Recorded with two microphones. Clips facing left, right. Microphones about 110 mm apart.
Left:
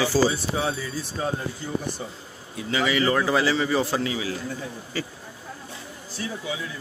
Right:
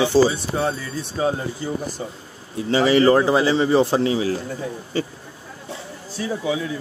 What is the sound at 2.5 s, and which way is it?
A man's voice, 35° right (ahead or behind).